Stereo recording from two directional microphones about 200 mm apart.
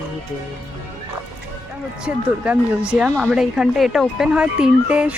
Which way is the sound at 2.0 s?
5° right (ahead or behind).